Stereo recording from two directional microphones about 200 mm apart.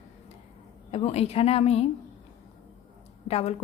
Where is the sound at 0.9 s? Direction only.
30° left (ahead or behind).